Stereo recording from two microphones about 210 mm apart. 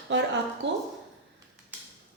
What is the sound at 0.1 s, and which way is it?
Speech, 55° right (ahead or behind).